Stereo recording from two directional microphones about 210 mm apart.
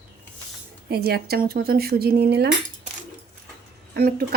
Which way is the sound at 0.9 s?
50° right (ahead or behind).